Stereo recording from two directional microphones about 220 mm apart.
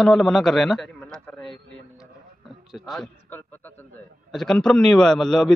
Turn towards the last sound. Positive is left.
turn(degrees=0)  # may be behind; listen again after turning